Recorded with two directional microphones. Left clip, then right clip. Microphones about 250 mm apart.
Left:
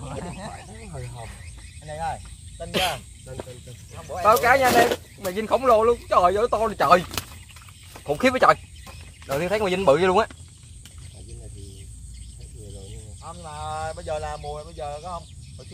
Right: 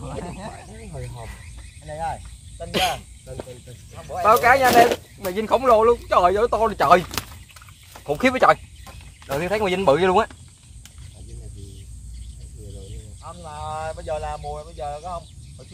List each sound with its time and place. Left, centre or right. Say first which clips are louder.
0.0 s snake: right 2 dB; left
0.7 s snake: right 2 dB; centre
1.9 s speech: right 1 dB; left
3.9 s speech: right 2 dB; left
4.2 s speech: right 2 dB; centre
7.9 s speech: right 1 dB; centre
13.2 s a sound: right 1 dB; left